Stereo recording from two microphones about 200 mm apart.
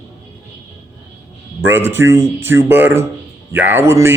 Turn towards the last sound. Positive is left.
turn(degrees=-15)  # may be behind; listen again after turning